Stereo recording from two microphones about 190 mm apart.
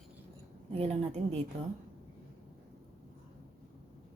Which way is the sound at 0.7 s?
35° right (ahead or behind).